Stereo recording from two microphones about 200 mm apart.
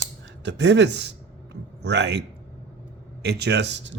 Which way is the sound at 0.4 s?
60° right (ahead or behind).